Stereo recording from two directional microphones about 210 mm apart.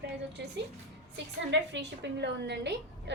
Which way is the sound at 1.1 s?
55° right (ahead or behind).